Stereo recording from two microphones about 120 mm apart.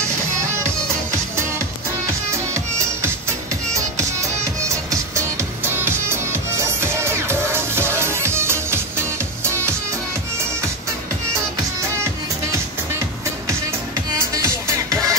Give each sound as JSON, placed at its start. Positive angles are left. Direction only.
{"t": 2.0, "sound": "music", "side_deg": -25}
{"t": 14.3, "sound": "music", "side_deg": -25}